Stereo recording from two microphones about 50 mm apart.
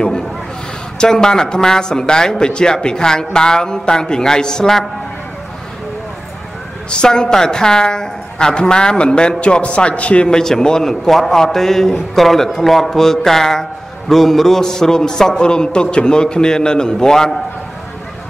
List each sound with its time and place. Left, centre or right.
0.9 s a man's voice: centre
6.9 s a man's voice: centre
10.2 s a man's voice: centre